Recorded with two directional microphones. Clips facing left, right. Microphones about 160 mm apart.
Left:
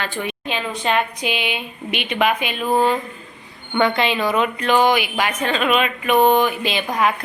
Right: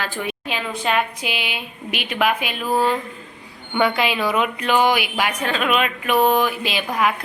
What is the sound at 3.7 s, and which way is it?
A woman's voice, 10° right (ahead or behind).